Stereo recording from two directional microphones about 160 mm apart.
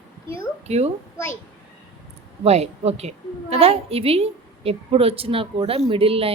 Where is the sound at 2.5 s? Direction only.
40° right (ahead or behind).